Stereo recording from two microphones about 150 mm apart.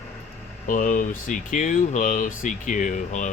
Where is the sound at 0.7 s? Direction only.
60° left (ahead or behind).